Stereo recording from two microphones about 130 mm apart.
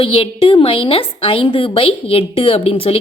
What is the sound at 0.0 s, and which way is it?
A woman's voice, 45° left (ahead or behind).